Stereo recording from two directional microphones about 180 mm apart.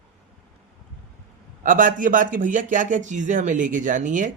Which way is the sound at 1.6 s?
45° right (ahead or behind).